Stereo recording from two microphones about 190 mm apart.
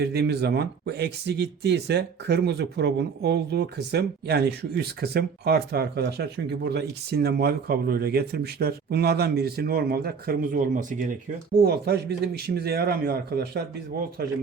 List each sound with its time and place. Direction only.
0.0 s speech: 60° right (ahead or behind); by 11.0 s 40° right (ahead or behind)
11.5 s speech: 55° right (ahead or behind)